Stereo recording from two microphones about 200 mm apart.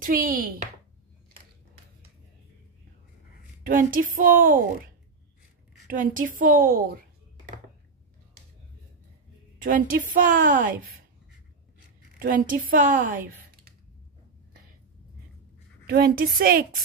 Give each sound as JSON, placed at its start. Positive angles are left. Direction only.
{"t": 0.0, "sound": "a woman's voice", "side_deg": -45}
{"t": 3.6, "sound": "a woman's voice", "side_deg": -45}
{"t": 5.9, "sound": "a woman's voice", "side_deg": -40}
{"t": 9.6, "sound": "a woman's voice", "side_deg": -40}
{"t": 12.2, "sound": "a woman's voice", "side_deg": -45}
{"t": 15.9, "sound": "a woman's voice", "side_deg": -50}